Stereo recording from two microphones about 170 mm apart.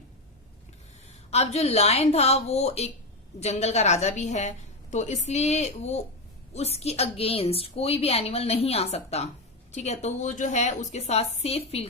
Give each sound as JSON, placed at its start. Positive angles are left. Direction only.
{"t": 1.3, "sound": "a woman's voice", "side_deg": 40}